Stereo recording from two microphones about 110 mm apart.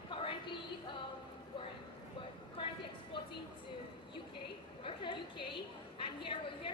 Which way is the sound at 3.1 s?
45° left (ahead or behind).